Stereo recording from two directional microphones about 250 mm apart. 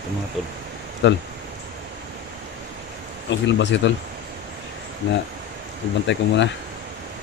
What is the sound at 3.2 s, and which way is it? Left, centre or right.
Speech, left.